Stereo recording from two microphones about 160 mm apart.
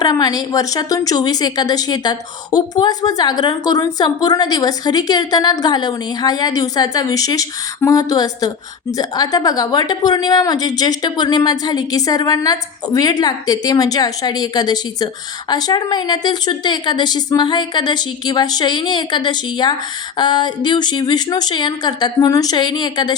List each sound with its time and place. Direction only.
0.0 s a woman's voice: 25° left (ahead or behind)